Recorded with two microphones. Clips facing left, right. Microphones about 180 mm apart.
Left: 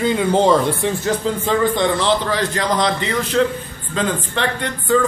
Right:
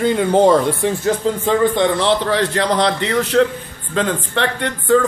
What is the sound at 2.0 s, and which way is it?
A man's voice, 65° right (ahead or behind).